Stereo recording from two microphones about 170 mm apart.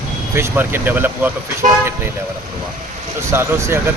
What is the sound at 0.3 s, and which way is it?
Speech, 15° right (ahead or behind).